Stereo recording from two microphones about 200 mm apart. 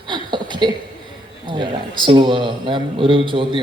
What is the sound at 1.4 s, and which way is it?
A man's voice, 25° right (ahead or behind).